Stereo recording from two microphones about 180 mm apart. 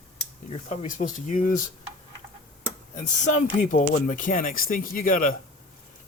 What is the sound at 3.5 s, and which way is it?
Speech, 45° left (ahead or behind).